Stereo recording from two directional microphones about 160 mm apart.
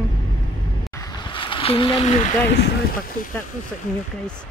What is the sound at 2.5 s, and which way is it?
Speech, 90° left.